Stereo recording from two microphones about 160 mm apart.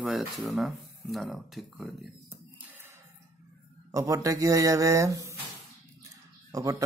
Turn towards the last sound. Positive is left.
turn(degrees=-20)  # may be behind; listen again after turning